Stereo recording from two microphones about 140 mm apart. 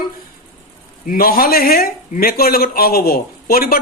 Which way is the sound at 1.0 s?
90° left.